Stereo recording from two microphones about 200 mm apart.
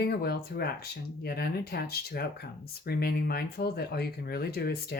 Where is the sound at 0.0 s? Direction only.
50° left (ahead or behind).